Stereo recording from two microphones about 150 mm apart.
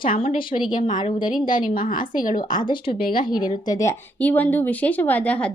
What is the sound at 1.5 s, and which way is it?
A woman's voice, 65° left (ahead or behind).